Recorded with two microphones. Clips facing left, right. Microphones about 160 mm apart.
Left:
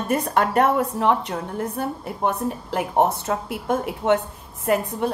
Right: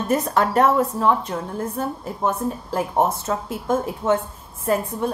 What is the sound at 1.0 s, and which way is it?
A woman's voice, 65° left (ahead or behind).